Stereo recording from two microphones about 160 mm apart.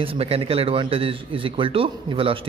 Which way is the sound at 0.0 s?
35° right (ahead or behind).